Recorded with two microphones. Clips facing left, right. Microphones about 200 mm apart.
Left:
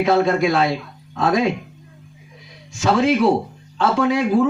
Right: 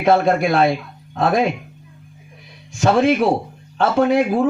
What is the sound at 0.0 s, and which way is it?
Speech, 60° right (ahead or behind).